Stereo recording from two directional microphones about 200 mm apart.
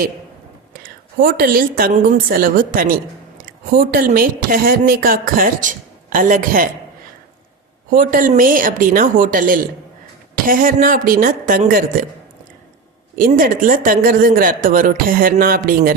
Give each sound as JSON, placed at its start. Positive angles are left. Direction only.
{"t": 0.7, "sound": "a woman's voice", "side_deg": -45}
{"t": 7.9, "sound": "speech", "side_deg": -45}
{"t": 13.1, "sound": "speech", "side_deg": -45}